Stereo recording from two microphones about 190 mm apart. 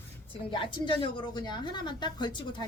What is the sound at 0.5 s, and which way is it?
A woman's voice, 25° left (ahead or behind).